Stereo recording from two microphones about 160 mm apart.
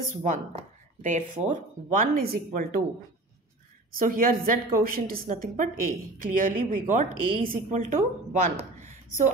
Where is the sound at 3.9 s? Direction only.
60° right (ahead or behind).